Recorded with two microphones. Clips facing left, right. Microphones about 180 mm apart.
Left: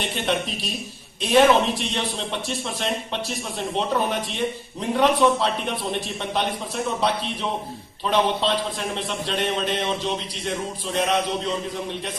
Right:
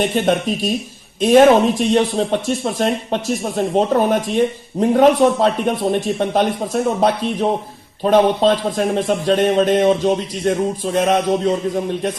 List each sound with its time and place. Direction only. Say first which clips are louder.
0.0 s speech: right 9 dB; 45° right (ahead or behind)